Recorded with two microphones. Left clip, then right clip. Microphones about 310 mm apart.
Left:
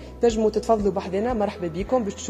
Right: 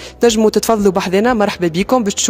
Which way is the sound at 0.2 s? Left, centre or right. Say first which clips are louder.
Right 9 dB; right.